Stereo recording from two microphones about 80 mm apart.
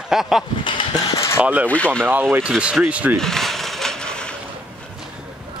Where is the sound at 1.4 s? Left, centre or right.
Centre.